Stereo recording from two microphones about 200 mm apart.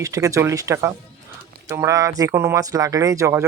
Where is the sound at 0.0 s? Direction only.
15° right (ahead or behind).